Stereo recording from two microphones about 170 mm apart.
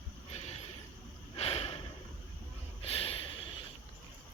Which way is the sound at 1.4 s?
35° left (ahead or behind).